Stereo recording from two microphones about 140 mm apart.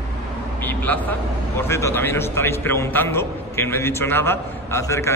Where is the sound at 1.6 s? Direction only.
20° left (ahead or behind).